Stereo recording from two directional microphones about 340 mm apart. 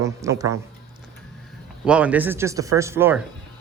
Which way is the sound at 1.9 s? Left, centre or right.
Centre.